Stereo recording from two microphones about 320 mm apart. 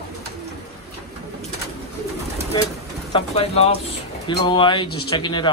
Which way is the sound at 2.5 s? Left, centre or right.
Centre.